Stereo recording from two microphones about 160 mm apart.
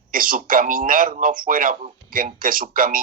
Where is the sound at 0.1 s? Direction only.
60° right (ahead or behind).